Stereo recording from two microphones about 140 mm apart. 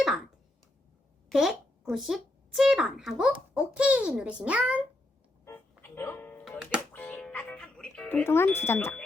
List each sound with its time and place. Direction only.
0.0 s speech: centre (ahead or behind)
1.3 s speech: centre (ahead or behind)
5.8 s music: 15° left (ahead or behind)
8.2 s speech: 15° left (ahead or behind)